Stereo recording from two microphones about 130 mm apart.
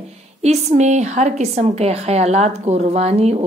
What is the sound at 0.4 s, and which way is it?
A woman's voice, 60° right (ahead or behind).